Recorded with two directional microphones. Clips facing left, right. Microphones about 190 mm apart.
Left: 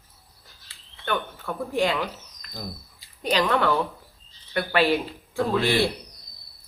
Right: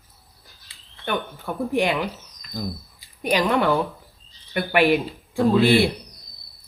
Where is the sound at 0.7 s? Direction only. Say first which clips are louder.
Right 1 dB; 15° right (ahead or behind).